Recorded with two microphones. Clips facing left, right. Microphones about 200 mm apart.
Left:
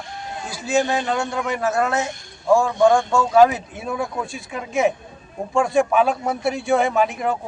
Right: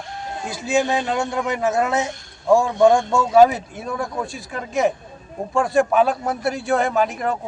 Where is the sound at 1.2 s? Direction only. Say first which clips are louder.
Right 1 dB; 20° right (ahead or behind).